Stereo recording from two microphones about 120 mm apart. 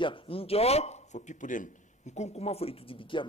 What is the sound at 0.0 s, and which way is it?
A man's voice, 50° left (ahead or behind).